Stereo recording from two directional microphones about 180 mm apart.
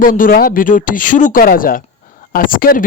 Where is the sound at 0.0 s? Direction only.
50° left (ahead or behind).